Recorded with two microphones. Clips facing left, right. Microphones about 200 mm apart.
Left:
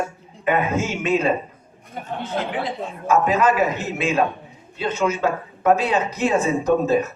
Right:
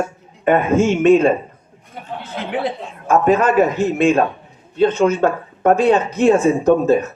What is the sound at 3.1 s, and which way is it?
Speech, 55° right (ahead or behind).